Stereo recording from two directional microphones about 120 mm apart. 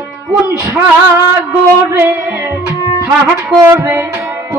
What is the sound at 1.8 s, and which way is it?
Music, 25° right (ahead or behind).